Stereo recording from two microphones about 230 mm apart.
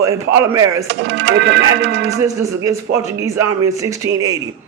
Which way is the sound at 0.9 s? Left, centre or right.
Right.